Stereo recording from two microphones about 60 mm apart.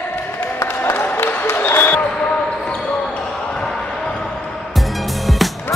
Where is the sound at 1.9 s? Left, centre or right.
Centre.